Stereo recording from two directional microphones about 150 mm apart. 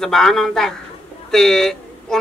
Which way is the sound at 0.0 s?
5° left (ahead or behind).